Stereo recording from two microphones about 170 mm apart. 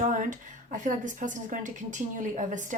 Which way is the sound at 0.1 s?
50° right (ahead or behind).